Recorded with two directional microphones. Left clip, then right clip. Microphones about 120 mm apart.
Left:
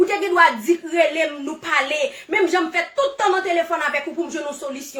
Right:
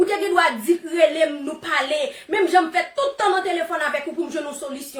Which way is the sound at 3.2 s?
20° right (ahead or behind).